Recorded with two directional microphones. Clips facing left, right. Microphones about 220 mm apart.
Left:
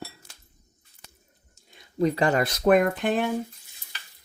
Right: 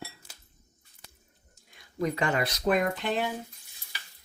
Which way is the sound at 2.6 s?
55° left (ahead or behind).